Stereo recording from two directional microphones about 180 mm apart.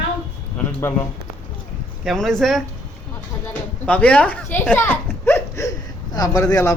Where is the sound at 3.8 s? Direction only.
5° left (ahead or behind).